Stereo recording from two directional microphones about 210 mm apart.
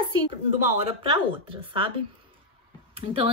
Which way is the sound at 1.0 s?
25° right (ahead or behind).